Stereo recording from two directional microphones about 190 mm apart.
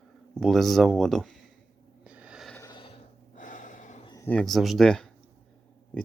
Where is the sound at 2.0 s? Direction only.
5° right (ahead or behind).